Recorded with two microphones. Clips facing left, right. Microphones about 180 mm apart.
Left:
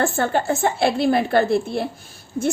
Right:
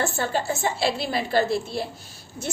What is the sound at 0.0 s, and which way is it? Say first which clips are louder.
A woman's voice: left 5 dB; 55° left (ahead or behind).